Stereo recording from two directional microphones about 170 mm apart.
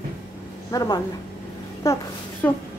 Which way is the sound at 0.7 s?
20° left (ahead or behind).